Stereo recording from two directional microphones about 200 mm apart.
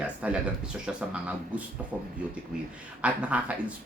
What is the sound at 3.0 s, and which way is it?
Speech, 5° right (ahead or behind).